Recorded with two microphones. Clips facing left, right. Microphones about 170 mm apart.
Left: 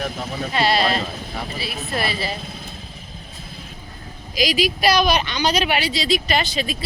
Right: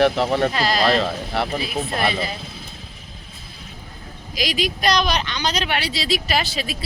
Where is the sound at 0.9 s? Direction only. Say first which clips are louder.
Right 4 dB; 80° right.